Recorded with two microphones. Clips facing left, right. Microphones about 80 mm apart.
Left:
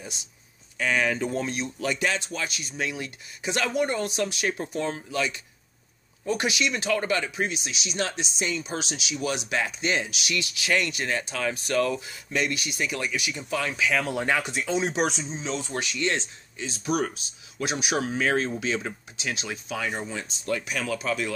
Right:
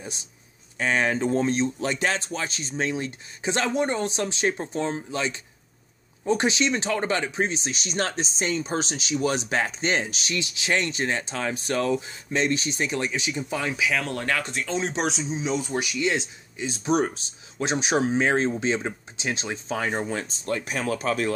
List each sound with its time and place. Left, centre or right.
0.7 s speech: right
13.7 s speech: centre
14.0 s speech: centre
16.6 s speech: right